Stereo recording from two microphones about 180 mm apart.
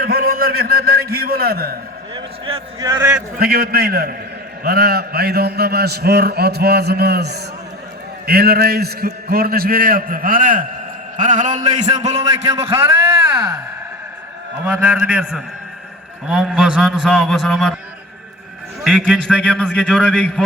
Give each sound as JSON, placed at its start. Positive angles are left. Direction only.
{"t": 0.0, "sound": "a sound", "side_deg": -55}
{"t": 2.1, "sound": "a man's voice", "side_deg": -25}
{"t": 3.3, "sound": "a man's voice", "side_deg": -60}
{"t": 14.6, "sound": "a man's voice", "side_deg": -10}
{"t": 18.9, "sound": "a man's voice", "side_deg": -5}